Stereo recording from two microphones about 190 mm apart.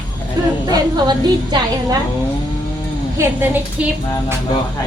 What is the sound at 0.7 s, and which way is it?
A woman's voice, 20° right (ahead or behind).